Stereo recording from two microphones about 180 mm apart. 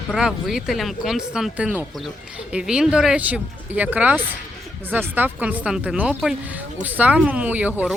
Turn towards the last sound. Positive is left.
turn(degrees=-10)  # may be behind; listen again after turning